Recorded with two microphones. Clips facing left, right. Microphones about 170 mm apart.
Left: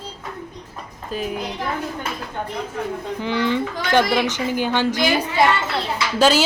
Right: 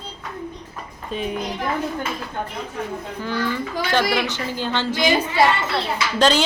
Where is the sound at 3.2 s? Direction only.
20° left (ahead or behind).